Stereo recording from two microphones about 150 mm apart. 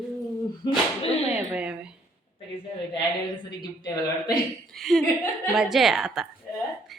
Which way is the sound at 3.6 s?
30° left (ahead or behind).